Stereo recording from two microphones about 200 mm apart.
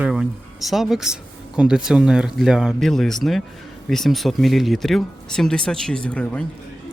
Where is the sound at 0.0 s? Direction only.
Centre (ahead or behind).